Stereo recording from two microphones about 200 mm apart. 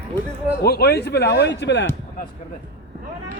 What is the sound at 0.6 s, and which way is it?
Speech, 55° left (ahead or behind).